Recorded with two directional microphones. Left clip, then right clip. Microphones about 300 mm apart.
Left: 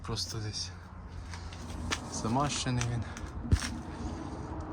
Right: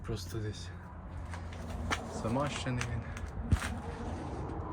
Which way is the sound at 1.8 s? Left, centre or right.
Centre.